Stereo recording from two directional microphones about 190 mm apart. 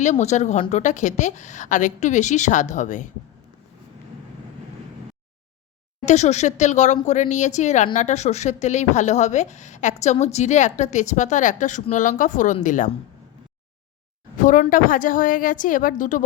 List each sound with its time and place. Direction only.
0.0 s speech: 35° left (ahead or behind)
6.1 s a woman's voice: 35° left (ahead or behind)
14.3 s a woman's voice: 45° left (ahead or behind)